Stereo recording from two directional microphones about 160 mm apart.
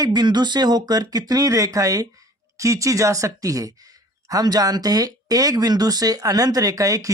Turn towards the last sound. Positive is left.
turn(degrees=-20)  # may be behind; listen again after turning